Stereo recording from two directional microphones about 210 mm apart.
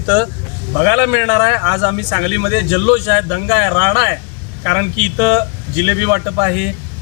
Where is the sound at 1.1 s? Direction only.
20° right (ahead or behind).